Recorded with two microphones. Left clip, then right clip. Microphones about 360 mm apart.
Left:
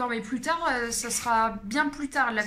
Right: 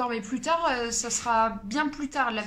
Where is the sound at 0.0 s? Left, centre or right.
Centre.